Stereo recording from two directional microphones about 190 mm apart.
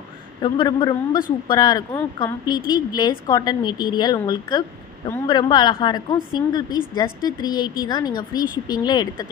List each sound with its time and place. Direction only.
0.4 s a woman's voice: 25° left (ahead or behind)